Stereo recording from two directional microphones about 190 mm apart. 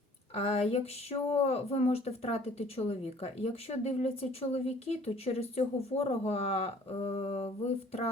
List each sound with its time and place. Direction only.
0.3 s speech: 35° left (ahead or behind)